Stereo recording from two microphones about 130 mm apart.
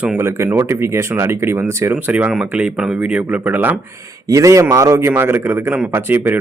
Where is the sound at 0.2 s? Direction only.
20° right (ahead or behind).